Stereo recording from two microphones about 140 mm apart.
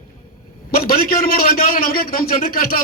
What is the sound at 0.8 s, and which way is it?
A man's voice, 90° left.